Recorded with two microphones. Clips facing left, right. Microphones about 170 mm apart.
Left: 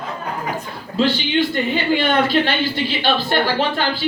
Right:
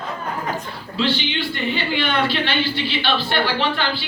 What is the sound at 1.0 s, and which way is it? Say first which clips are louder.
A woman's voice: left 5 dB; 45° left (ahead or behind).